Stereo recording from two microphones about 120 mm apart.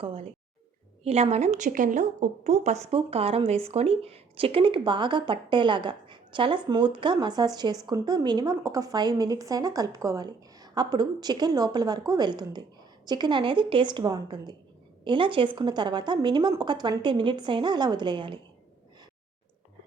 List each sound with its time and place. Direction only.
0.0 s speech: 50° right (ahead or behind)
1.0 s a woman's voice: 60° right (ahead or behind)
2.9 s speech: 55° right (ahead or behind); by 18.3 s 40° right (ahead or behind)